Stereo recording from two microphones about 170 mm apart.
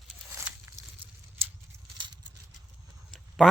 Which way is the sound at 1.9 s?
25° right (ahead or behind).